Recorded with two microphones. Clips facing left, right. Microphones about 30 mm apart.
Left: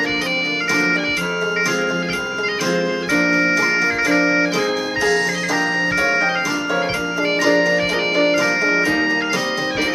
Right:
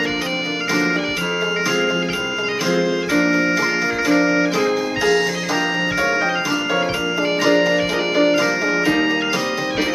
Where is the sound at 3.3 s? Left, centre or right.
Centre.